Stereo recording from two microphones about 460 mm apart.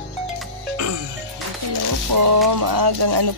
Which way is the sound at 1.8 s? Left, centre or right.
Right.